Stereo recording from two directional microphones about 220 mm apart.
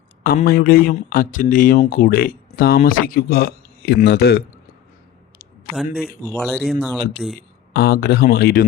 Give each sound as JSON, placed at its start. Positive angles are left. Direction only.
{"t": 0.3, "sound": "speech", "side_deg": 45}
{"t": 6.3, "sound": "speech", "side_deg": 0}
{"t": 7.7, "sound": "speech", "side_deg": 45}